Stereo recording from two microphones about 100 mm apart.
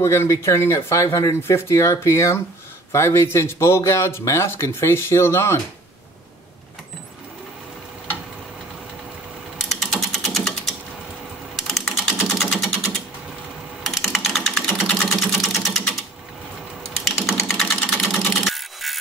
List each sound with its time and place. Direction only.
0.0 s speech: 30° left (ahead or behind)
9.6 s a sound: 5° left (ahead or behind)
13.8 s typing: centre (ahead or behind)
14.9 s vehicle: 5° left (ahead or behind)
17.0 s typing: centre (ahead or behind)
17.8 s sewing machine: 5° left (ahead or behind)